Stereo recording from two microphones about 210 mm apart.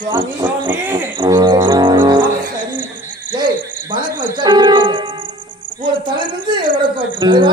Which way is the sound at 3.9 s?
20° right (ahead or behind).